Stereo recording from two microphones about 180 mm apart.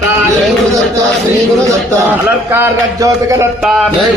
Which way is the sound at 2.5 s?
15° right (ahead or behind).